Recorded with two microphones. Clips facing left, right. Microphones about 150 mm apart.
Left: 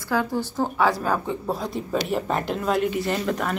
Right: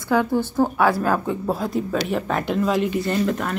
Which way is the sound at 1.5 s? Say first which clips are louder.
Right 3 dB; centre (ahead or behind).